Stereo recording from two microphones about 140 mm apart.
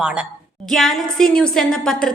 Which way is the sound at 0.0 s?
5° right (ahead or behind).